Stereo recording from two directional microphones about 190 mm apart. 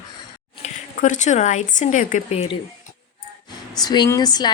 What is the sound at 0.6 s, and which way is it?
Speech, 40° left (ahead or behind).